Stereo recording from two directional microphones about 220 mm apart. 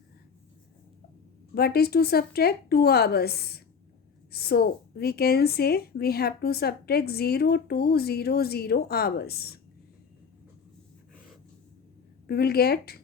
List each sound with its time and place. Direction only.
1.5 s a woman's voice: 45° left (ahead or behind)
12.3 s a woman's voice: 45° left (ahead or behind)